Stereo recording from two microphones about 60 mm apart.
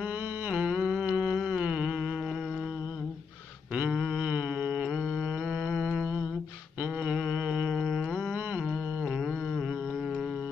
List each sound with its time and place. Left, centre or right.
0.0 s humming: right
4.2 s humming: right
4.8 s mantra: centre
7.0 s humming: centre
8.0 s humming: centre
8.3 s humming: right
9.0 s a sound: centre